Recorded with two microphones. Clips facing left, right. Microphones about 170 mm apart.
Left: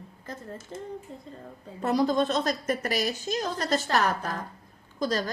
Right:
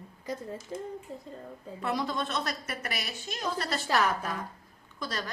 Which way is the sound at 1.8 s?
40° left (ahead or behind).